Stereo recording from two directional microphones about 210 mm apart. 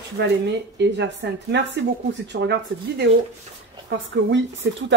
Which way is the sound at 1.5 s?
55° right (ahead or behind).